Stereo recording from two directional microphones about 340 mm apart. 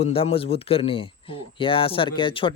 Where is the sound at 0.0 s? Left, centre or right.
Centre.